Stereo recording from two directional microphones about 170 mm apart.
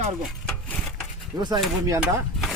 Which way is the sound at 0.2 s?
5° left (ahead or behind).